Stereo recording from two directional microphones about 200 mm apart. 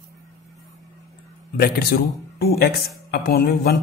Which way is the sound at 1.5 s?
50° left (ahead or behind).